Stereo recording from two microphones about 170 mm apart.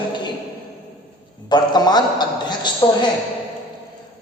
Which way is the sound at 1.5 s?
25° left (ahead or behind).